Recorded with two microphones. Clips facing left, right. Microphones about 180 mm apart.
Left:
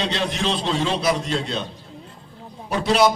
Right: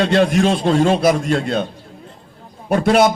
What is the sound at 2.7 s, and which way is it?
Speech, 50° right (ahead or behind).